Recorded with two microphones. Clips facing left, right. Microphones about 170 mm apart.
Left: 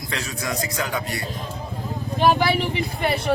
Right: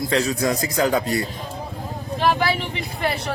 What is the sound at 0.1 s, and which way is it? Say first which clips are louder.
Speech: right 7 dB; 40° right (ahead or behind).